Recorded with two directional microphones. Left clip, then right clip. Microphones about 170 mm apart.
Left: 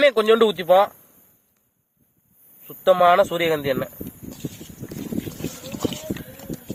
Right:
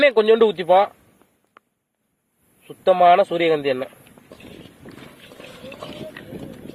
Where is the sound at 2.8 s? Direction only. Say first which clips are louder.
Right 1 dB; 25° right (ahead or behind).